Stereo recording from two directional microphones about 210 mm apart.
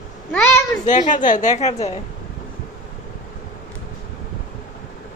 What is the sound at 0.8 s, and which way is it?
A woman's voice, 35° left (ahead or behind).